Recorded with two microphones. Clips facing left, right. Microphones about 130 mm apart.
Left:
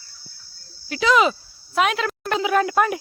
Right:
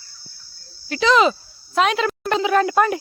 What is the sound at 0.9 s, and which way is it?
Speech, 5° left (ahead or behind).